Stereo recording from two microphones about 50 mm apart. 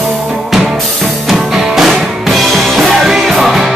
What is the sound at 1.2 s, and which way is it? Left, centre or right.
Music, centre.